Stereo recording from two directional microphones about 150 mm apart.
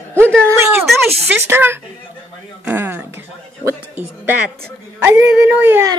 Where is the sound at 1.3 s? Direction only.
15° right (ahead or behind).